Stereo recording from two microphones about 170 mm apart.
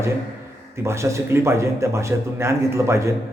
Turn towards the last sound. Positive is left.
turn(degrees=-15)  # may be behind; listen again after turning